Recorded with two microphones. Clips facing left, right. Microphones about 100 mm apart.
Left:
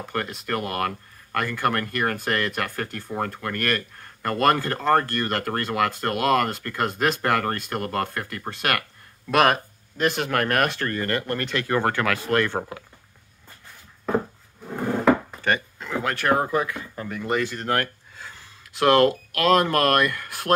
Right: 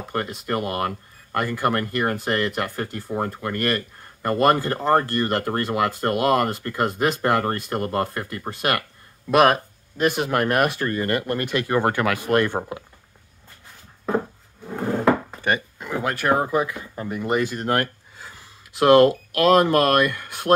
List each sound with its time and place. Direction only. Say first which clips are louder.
0.1 s speech: right 3 dB; 5° right (ahead or behind)
15.4 s speech: right 3 dB; 15° right (ahead or behind)